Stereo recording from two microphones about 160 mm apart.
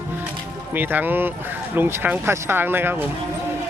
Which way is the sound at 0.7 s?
10° right (ahead or behind).